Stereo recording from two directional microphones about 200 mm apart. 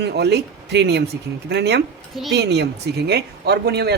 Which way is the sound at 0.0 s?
55° right (ahead or behind).